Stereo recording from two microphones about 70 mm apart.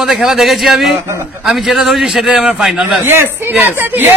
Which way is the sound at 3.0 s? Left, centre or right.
Right.